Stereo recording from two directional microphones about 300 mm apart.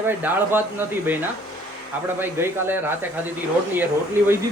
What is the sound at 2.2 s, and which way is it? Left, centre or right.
Speech, centre.